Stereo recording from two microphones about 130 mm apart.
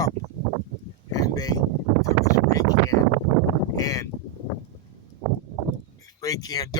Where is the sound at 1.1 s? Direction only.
30° left (ahead or behind).